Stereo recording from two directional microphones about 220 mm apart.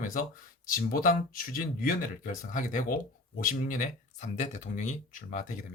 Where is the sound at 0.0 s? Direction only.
40° left (ahead or behind).